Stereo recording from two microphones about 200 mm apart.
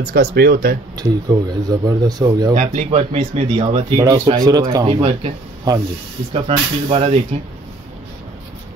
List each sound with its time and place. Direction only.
0.0 s speech: 55° right (ahead or behind)
0.9 s speech: 20° right (ahead or behind)
2.5 s speech: 35° right (ahead or behind); by 4.8 s 20° right (ahead or behind)
4.8 s speech: 30° right (ahead or behind)
5.7 s speech: 15° right (ahead or behind)
6.3 s speech: 30° right (ahead or behind)